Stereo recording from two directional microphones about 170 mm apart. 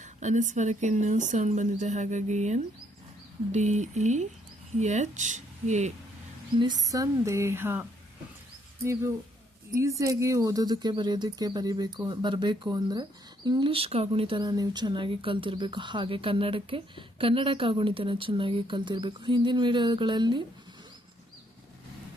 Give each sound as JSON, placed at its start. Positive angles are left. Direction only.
{"t": 0.0, "sound": "speech", "side_deg": -45}
{"t": 6.6, "sound": "speech", "side_deg": -25}